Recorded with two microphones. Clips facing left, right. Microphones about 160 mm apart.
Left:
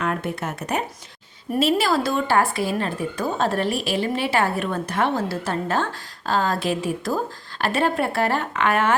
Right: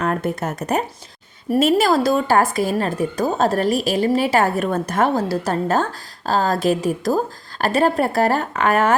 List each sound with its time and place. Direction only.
0.0 s speech: 40° right (ahead or behind)